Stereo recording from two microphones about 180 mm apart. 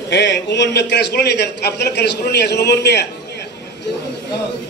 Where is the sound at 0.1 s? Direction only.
75° left (ahead or behind).